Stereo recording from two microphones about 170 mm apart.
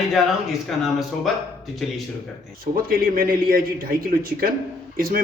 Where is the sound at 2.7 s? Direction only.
55° right (ahead or behind).